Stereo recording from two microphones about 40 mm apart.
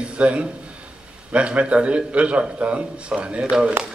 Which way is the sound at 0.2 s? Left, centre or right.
Right.